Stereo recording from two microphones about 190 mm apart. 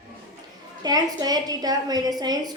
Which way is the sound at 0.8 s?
20° right (ahead or behind).